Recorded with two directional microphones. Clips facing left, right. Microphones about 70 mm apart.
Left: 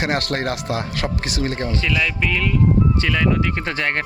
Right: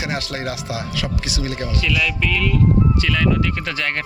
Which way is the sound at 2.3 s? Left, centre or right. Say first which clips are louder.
Right 1 dB; left.